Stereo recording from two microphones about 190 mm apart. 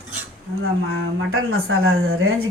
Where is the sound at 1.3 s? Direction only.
90° right.